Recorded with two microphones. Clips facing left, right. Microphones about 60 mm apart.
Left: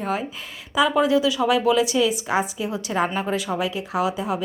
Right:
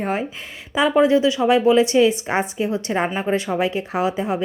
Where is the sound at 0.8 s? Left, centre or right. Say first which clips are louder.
Right 3 dB; right.